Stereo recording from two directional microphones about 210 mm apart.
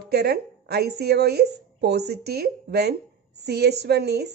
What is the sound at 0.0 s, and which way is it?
A woman's voice, 50° right (ahead or behind).